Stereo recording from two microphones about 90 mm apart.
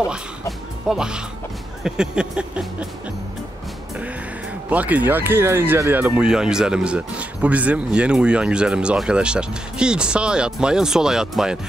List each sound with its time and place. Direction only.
0.1 s speech: 5° right (ahead or behind)
4.6 s speech: 20° right (ahead or behind)